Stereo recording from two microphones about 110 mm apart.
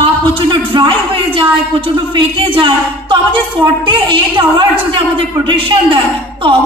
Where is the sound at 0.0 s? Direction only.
50° right (ahead or behind).